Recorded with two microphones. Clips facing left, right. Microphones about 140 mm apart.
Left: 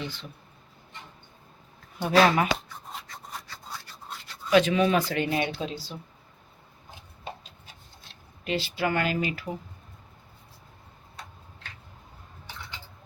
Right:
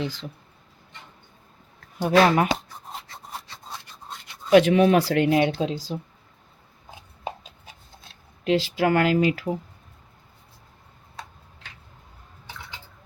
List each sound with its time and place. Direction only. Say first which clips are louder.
0.0 s speech: right 6 dB; 90° right
2.0 s speech: right 2 dB; 20° right (ahead or behind)
3.1 s rub: right 2 dB; 25° right (ahead or behind)
4.4 s speech: right 5 dB; 60° right (ahead or behind); by 5.9 s 90° right
8.4 s speech: right 7 dB; 90° right